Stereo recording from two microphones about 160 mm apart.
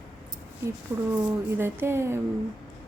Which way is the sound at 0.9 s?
15° right (ahead or behind).